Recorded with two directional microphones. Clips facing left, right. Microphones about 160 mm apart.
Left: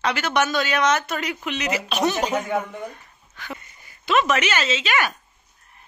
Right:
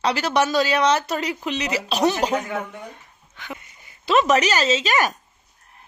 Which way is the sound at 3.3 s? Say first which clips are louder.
Even; 20° right (ahead or behind).